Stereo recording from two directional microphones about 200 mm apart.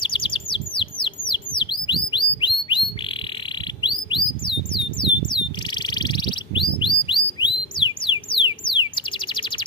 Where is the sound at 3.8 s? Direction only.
25° left (ahead or behind).